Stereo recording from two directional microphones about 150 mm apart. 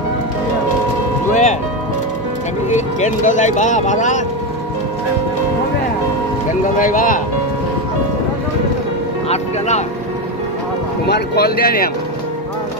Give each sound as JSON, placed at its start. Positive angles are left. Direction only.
{"t": 1.3, "sound": "music", "side_deg": 55}
{"t": 3.0, "sound": "speech", "side_deg": 55}
{"t": 6.6, "sound": "speech", "side_deg": 60}
{"t": 9.3, "sound": "speech", "side_deg": 50}
{"t": 11.1, "sound": "speech", "side_deg": 90}